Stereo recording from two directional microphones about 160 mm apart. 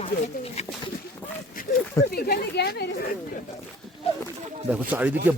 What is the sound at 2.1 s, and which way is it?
Speech, 70° left (ahead or behind).